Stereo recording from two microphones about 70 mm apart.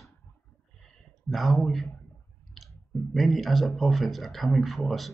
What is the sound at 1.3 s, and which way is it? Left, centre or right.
Speech, centre.